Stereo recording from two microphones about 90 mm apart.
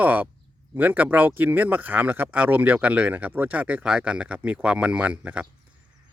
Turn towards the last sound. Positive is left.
turn(degrees=-15)  # may be behind; listen again after turning